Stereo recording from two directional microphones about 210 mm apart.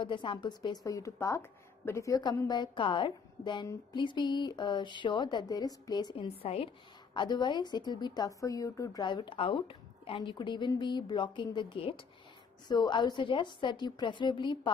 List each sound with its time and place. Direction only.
0.0 s a woman's voice: 25° left (ahead or behind)